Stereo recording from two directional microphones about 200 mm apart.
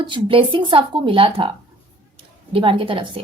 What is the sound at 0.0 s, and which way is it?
A woman's voice, 25° right (ahead or behind).